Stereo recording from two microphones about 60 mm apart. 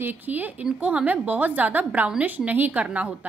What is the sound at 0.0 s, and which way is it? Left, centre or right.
A woman's voice, right.